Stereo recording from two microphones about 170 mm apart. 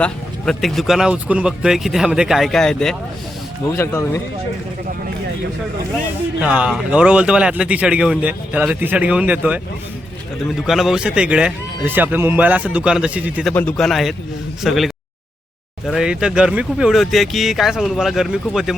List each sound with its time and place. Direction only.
0.0 s speech: 5° left (ahead or behind)
3.7 s speech: 15° left (ahead or behind)
6.4 s a man's voice: 5° right (ahead or behind)
10.7 s a man's voice: centre (ahead or behind)
13.5 s speech: 10° left (ahead or behind)
15.9 s speech: 5° right (ahead or behind)